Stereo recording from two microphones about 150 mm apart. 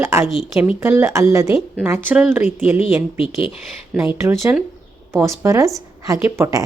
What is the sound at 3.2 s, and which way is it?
Speech, 40° left (ahead or behind).